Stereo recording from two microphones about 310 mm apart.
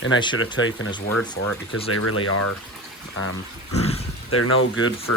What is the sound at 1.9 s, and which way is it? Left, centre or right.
Speech, left.